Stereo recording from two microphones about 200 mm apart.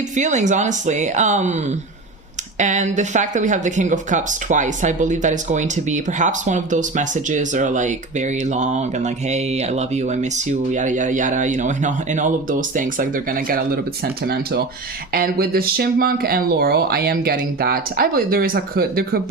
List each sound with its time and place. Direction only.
0.2 s speech: 35° right (ahead or behind)